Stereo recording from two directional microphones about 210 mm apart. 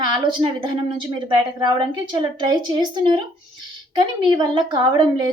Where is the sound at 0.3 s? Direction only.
20° right (ahead or behind).